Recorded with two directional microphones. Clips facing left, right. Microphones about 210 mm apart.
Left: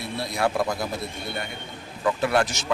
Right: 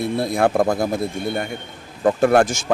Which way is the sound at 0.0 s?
50° right (ahead or behind).